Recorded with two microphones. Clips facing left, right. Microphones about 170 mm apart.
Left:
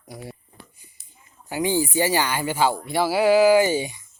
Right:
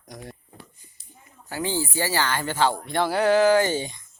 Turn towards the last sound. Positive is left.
turn(degrees=10)  # may be behind; listen again after turning